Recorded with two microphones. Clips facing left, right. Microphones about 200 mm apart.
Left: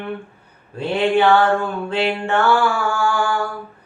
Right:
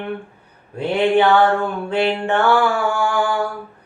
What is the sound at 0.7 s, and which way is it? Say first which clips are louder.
Mantra: right 2 dB; 15° right (ahead or behind).